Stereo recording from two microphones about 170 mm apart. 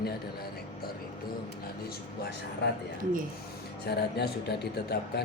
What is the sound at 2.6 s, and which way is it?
Speech, 75° left (ahead or behind).